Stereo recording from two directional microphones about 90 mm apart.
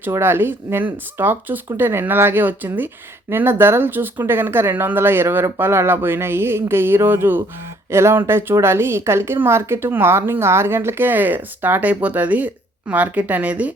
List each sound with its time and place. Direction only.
0.1 s a woman's voice: 25° right (ahead or behind)